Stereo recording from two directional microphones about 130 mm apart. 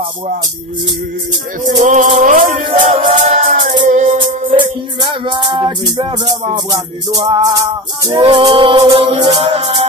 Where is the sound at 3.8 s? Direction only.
70° right (ahead or behind).